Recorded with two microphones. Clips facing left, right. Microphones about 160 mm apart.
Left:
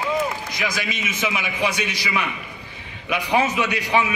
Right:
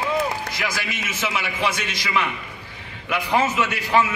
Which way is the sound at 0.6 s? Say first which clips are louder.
Left 2 dB; 15° left (ahead or behind).